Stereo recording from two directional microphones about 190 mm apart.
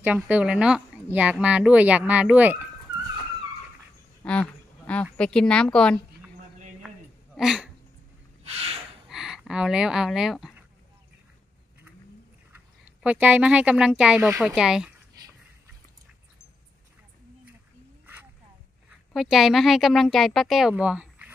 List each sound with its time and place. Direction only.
0.0 s speech: 5° right (ahead or behind)
4.2 s a sound: 5° left (ahead or behind)
5.1 s speech: 5° left (ahead or behind)
7.3 s speech: centre (ahead or behind)
8.5 s a sound: 35° right (ahead or behind)
9.1 s speech: centre (ahead or behind)
12.5 s speech: 10° right (ahead or behind)
18.9 s speech: centre (ahead or behind)